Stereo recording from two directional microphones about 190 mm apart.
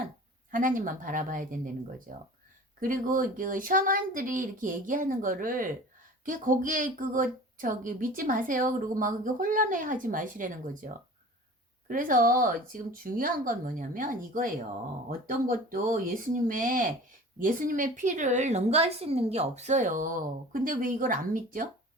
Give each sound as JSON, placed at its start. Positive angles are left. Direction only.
{"t": 0.5, "sound": "a woman's voice", "side_deg": -45}